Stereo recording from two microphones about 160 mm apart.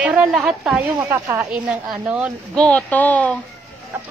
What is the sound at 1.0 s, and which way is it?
Speech, 20° right (ahead or behind).